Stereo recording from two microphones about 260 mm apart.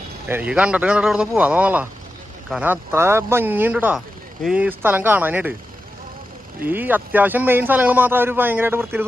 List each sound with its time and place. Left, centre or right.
0.3 s a man's voice: centre
6.7 s a man's voice: centre